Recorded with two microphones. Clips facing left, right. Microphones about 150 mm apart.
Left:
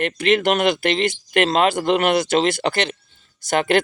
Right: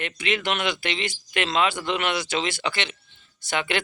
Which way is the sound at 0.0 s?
45° left (ahead or behind).